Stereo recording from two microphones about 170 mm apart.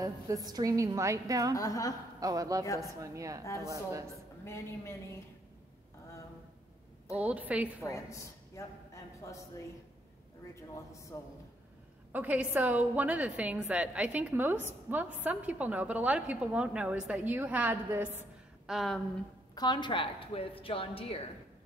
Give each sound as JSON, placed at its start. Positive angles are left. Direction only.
{"t": 0.0, "sound": "a woman's voice", "side_deg": -20}
{"t": 1.5, "sound": "a woman's voice", "side_deg": 20}
{"t": 2.1, "sound": "a woman's voice", "side_deg": -20}
{"t": 4.5, "sound": "a man's voice", "side_deg": 15}
{"t": 7.2, "sound": "a woman's voice", "side_deg": -10}
{"t": 7.8, "sound": "a man's voice", "side_deg": 20}
{"t": 10.5, "sound": "a man's voice", "side_deg": 20}
{"t": 12.1, "sound": "a woman's voice", "side_deg": -10}
{"t": 18.7, "sound": "speech", "side_deg": 0}
{"t": 19.5, "sound": "a woman's voice", "side_deg": 25}